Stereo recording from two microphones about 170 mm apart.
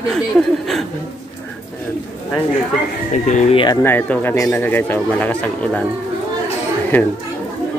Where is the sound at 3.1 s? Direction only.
40° left (ahead or behind).